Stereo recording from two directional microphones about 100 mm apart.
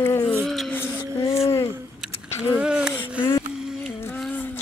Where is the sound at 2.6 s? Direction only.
10° right (ahead or behind).